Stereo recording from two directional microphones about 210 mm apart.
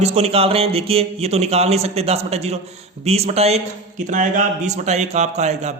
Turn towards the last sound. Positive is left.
turn(degrees=-35)  # may be behind; listen again after turning